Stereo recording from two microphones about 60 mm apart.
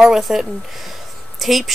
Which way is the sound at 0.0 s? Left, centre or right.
Centre.